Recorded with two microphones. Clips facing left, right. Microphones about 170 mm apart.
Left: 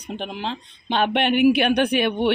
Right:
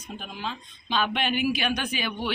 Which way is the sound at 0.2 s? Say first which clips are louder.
Left 6 dB; 65° left (ahead or behind).